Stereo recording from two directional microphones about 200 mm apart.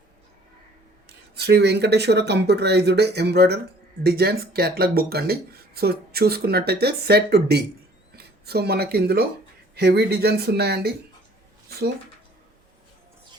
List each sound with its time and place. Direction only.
1.4 s speech: 55° right (ahead or behind)